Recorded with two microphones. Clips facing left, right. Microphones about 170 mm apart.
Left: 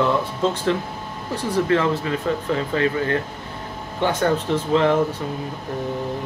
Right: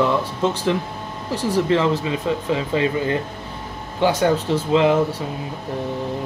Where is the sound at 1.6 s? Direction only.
15° right (ahead or behind).